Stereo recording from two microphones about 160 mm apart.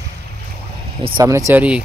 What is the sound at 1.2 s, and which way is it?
Speech, 20° right (ahead or behind).